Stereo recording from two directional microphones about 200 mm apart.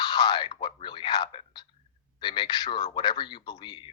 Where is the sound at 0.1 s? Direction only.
20° left (ahead or behind).